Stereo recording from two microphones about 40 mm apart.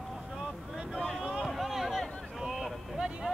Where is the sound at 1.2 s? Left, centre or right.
Right.